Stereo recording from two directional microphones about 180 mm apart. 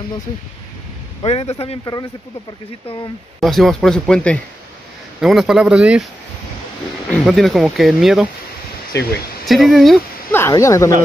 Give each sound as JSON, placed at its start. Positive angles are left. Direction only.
{"t": 1.2, "sound": "a man's voice", "side_deg": 35}
{"t": 3.3, "sound": "speech", "side_deg": 0}
{"t": 7.1, "sound": "speech", "side_deg": 0}
{"t": 8.9, "sound": "speech", "side_deg": 15}
{"t": 9.5, "sound": "speech", "side_deg": 0}
{"t": 10.3, "sound": "speech", "side_deg": 15}